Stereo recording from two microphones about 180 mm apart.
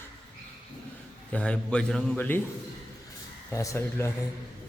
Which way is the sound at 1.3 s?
5° left (ahead or behind).